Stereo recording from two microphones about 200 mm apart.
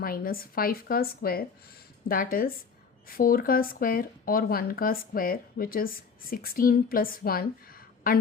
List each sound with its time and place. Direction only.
0.0 s speech: 45° left (ahead or behind)